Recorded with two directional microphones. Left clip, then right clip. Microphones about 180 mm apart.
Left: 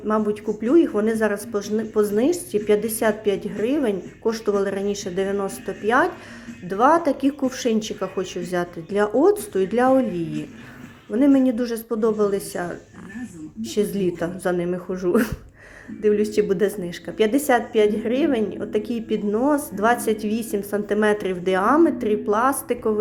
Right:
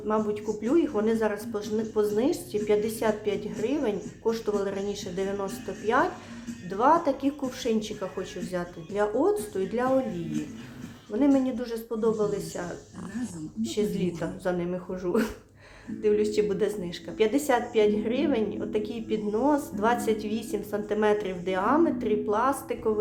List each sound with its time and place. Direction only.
0.1 s a woman's voice: 25° left (ahead or behind)
11.2 s a woman's voice: 25° left (ahead or behind)